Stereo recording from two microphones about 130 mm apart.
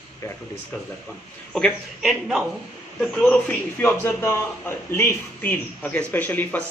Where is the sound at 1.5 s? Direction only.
5° left (ahead or behind).